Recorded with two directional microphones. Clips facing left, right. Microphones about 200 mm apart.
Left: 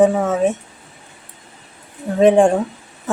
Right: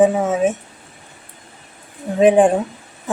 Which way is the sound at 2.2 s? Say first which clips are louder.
Even; 5° right (ahead or behind).